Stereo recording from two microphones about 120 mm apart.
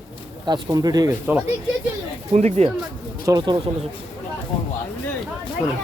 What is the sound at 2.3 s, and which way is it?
Speech, 65° right (ahead or behind).